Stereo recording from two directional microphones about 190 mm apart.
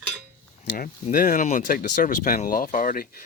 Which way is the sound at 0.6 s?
45° left (ahead or behind).